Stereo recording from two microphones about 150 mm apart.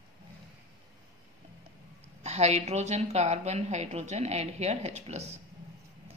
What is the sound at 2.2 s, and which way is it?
A woman's voice, 45° right (ahead or behind).